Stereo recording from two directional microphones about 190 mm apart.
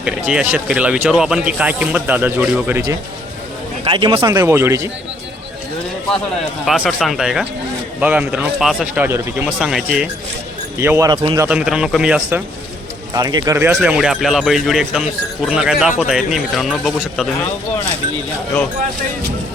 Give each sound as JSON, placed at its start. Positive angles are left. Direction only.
{"t": 0.0, "sound": "speech", "side_deg": -5}
{"t": 3.8, "sound": "a man's voice", "side_deg": -30}
{"t": 4.3, "sound": "speech", "side_deg": -15}
{"t": 6.7, "sound": "speech", "side_deg": 0}
{"t": 10.8, "sound": "speech", "side_deg": -15}
{"t": 11.4, "sound": "speech", "side_deg": -5}
{"t": 13.1, "sound": "speech", "side_deg": -20}